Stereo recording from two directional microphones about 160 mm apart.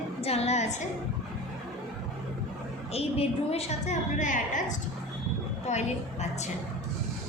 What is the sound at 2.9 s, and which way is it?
A woman's voice, 40° left (ahead or behind).